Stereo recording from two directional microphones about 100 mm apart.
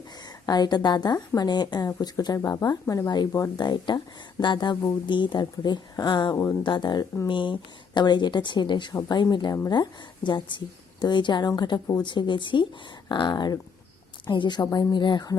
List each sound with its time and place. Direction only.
0.4 s speech: 40° left (ahead or behind)
3.1 s speech: 45° left (ahead or behind)
6.3 s speech: 30° left (ahead or behind)
6.6 s speech: 50° left (ahead or behind)
8.9 s speech: 35° left (ahead or behind)